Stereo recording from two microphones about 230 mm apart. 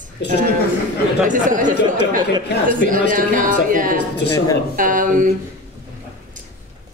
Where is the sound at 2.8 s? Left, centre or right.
Right.